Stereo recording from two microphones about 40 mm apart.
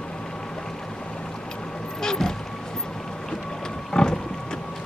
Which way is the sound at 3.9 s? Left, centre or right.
Centre.